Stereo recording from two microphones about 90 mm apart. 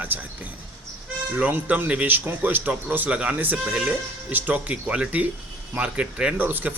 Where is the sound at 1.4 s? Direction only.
20° right (ahead or behind).